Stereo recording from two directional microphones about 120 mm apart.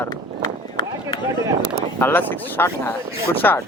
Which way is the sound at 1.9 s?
15° left (ahead or behind).